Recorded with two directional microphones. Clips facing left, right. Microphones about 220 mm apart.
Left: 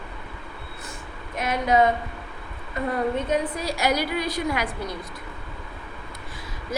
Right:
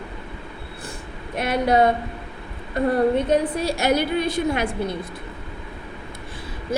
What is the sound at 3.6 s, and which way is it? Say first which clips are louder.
A woman's voice: right 4 dB; 25° right (ahead or behind).